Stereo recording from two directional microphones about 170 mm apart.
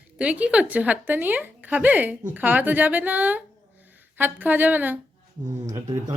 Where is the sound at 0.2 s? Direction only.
5° right (ahead or behind).